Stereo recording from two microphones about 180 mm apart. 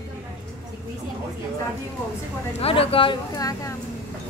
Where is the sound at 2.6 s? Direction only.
30° left (ahead or behind).